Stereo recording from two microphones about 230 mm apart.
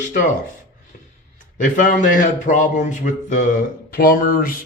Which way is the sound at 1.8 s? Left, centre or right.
Left.